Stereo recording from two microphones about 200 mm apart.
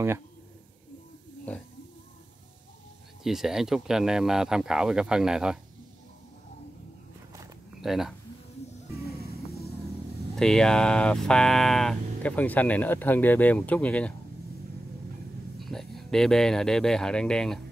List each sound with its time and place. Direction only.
3.3 s speech: centre (ahead or behind)
7.8 s speech: centre (ahead or behind)
9.0 s vehicle: 50° left (ahead or behind)
10.3 s speech: centre (ahead or behind)
15.6 s speech: centre (ahead or behind)